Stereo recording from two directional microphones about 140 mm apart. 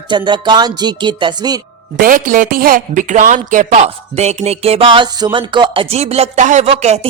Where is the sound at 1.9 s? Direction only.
80° right; by 6.6 s 60° right (ahead or behind).